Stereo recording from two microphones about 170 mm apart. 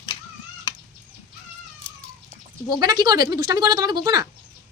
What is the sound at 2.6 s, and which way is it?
Speech, 25° right (ahead or behind).